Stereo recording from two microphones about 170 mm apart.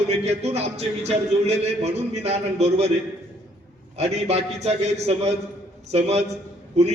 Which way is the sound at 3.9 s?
40° right (ahead or behind).